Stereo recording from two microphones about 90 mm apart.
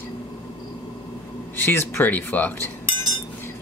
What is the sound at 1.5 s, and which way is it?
Speech, 25° left (ahead or behind).